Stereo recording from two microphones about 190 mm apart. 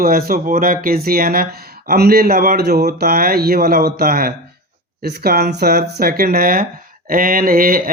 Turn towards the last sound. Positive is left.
turn(degrees=-50)  # may be behind; listen again after turning